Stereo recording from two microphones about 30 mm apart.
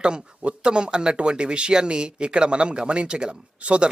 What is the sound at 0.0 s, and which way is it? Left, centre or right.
Speech, right.